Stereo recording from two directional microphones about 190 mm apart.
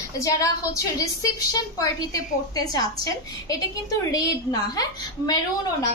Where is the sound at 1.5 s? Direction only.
20° left (ahead or behind).